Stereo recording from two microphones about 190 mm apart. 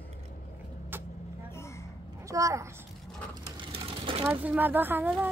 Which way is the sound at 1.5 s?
15° left (ahead or behind).